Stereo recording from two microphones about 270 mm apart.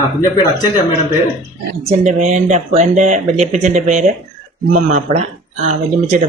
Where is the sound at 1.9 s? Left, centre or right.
Right.